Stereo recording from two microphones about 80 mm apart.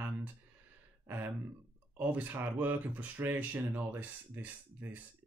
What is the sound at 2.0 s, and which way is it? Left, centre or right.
Speech, right.